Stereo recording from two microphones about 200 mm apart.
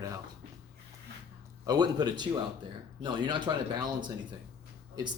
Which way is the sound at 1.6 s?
20° right (ahead or behind).